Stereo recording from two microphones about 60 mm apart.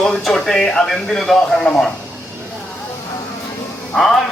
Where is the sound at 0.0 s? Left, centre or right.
Centre.